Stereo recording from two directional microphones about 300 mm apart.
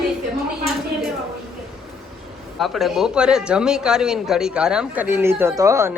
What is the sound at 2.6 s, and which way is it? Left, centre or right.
A man's voice, centre.